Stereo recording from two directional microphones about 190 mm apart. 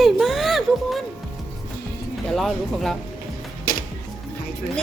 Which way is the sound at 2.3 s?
Centre (ahead or behind).